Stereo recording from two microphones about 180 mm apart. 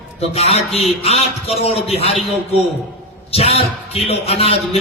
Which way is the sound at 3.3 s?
35° left (ahead or behind).